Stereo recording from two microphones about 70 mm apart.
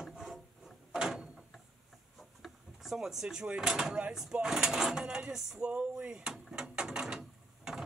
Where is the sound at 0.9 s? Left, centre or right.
Centre.